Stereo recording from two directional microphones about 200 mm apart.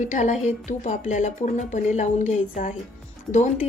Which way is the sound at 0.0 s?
40° left (ahead or behind).